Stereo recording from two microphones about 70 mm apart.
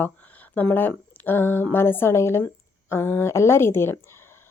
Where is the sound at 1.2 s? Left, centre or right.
Left.